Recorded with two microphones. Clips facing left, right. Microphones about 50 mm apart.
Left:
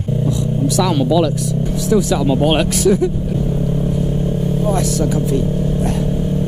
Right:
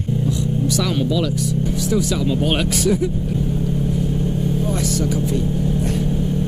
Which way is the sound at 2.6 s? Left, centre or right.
Centre.